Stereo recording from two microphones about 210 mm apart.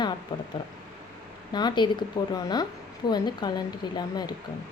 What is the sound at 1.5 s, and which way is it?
A woman's voice, 20° left (ahead or behind).